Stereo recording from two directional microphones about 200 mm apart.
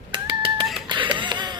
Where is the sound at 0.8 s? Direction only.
25° right (ahead or behind).